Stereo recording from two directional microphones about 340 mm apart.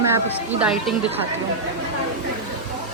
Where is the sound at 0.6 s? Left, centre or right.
Centre.